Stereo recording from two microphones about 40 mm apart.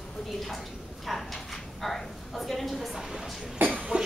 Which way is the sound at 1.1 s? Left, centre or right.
Centre.